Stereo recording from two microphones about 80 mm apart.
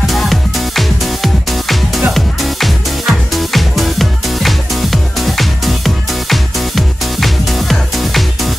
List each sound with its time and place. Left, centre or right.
0.1 s music: centre